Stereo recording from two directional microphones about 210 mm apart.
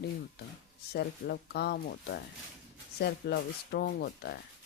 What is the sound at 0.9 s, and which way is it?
Speech, 50° left (ahead or behind).